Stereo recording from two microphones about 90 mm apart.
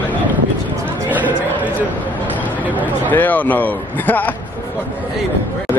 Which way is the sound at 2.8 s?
20° left (ahead or behind).